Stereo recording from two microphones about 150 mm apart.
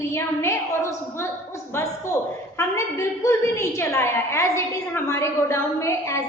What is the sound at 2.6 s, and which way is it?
A woman's voice, 20° left (ahead or behind).